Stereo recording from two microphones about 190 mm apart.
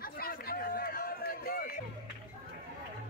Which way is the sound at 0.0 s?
50° left (ahead or behind).